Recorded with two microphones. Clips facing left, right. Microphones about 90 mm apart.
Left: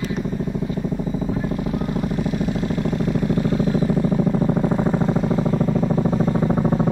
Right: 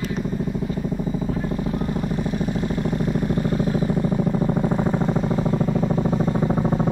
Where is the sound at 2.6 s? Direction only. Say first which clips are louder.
Left 1 dB; 25° right (ahead or behind).